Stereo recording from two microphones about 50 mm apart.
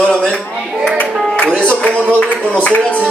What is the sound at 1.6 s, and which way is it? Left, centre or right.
A man's voice, left.